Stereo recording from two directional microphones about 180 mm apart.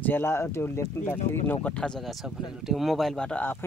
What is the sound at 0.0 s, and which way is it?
Speech, 10° left (ahead or behind).